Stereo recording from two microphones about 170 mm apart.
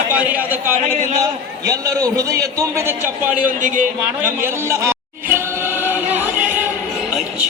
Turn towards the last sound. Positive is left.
turn(degrees=-10)  # may be behind; listen again after turning